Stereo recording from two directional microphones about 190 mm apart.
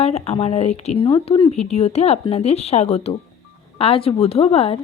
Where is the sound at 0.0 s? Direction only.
35° left (ahead or behind).